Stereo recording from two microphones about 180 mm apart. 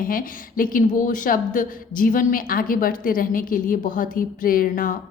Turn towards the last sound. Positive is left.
turn(degrees=50)  # may be behind; listen again after turning